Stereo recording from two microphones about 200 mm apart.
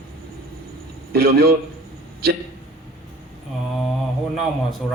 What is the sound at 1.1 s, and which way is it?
Speech, 50° right (ahead or behind).